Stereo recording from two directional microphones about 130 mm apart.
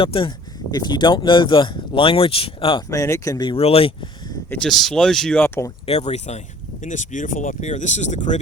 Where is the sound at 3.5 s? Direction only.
50° left (ahead or behind).